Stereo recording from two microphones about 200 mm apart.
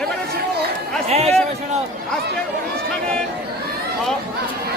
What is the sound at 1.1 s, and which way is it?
Speech, 30° right (ahead or behind).